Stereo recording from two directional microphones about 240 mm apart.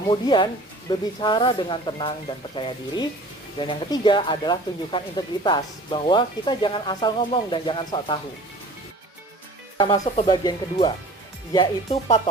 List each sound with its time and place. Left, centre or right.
0.1 s speech: centre
9.7 s speech: centre